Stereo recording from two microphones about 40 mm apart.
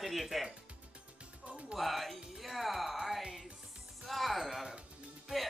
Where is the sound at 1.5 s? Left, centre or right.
Right.